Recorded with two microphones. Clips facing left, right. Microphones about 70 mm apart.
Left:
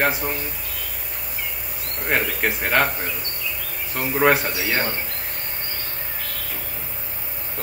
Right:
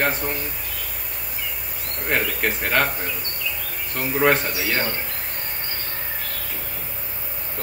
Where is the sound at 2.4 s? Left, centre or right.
Centre.